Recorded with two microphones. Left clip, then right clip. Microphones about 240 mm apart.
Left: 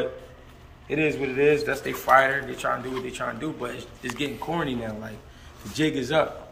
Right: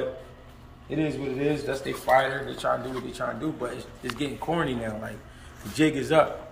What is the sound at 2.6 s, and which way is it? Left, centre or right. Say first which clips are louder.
Speech: even; left.